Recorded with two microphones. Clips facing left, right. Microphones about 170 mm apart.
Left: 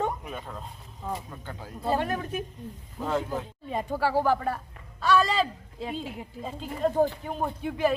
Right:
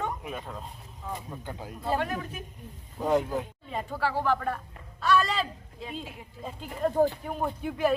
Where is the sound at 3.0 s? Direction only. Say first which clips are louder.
Right 3 dB; 15° right (ahead or behind).